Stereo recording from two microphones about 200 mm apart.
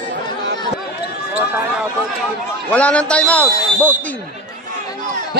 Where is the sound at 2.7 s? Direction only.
5° left (ahead or behind).